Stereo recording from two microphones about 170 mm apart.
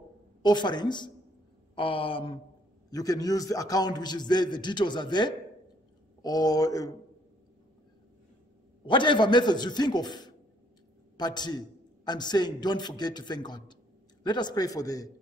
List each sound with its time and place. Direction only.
0.4 s a man's voice: 25° left (ahead or behind)
1.8 s a sound: 30° left (ahead or behind)
2.9 s a man's voice: 20° left (ahead or behind)
8.8 s a man's voice: 30° left (ahead or behind)